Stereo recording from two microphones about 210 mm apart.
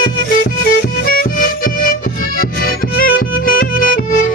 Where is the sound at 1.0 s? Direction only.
45° left (ahead or behind).